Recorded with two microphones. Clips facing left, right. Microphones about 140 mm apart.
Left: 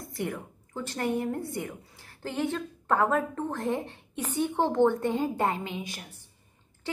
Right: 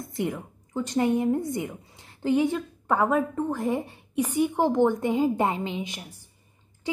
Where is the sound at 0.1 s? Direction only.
20° right (ahead or behind).